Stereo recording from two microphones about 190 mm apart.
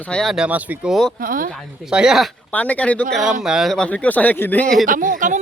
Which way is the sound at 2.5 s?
10° left (ahead or behind).